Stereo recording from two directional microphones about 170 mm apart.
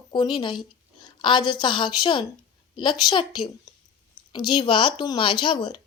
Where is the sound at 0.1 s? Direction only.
25° left (ahead or behind).